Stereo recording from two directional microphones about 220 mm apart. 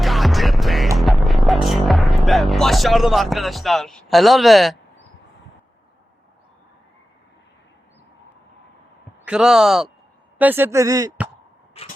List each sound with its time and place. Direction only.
0.0 s music: centre (ahead or behind)
9.2 s speech: 5° right (ahead or behind)
11.8 s vehicle: 25° left (ahead or behind)